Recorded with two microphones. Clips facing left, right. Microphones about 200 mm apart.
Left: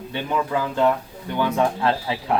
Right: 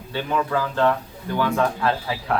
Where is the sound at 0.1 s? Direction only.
20° left (ahead or behind).